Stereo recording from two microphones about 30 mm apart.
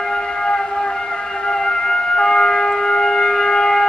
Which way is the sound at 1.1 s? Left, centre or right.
Left.